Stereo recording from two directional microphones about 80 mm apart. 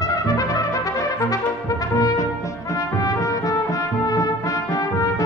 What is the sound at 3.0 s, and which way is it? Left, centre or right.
Brass instrument, left.